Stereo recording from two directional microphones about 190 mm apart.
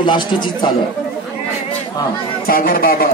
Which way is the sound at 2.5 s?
50° left (ahead or behind).